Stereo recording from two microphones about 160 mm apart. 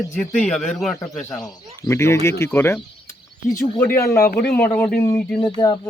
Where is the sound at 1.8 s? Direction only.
15° left (ahead or behind).